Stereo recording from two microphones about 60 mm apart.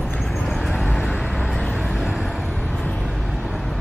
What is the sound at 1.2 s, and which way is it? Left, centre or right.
Vehicle, centre.